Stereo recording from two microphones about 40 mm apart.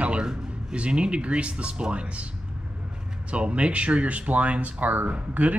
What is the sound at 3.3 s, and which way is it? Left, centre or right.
Speech, right.